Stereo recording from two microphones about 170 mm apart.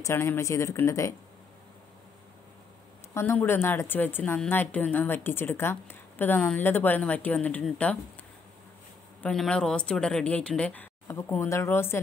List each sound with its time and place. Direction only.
0.0 s a woman's voice: 15° left (ahead or behind)
3.2 s a woman's voice: 15° left (ahead or behind)
9.2 s a woman's voice: 5° left (ahead or behind)